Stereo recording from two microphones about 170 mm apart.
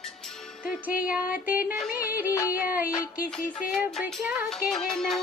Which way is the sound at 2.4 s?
10° right (ahead or behind).